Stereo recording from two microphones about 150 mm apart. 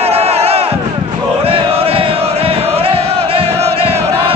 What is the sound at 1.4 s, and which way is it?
Chant, 40° right (ahead or behind).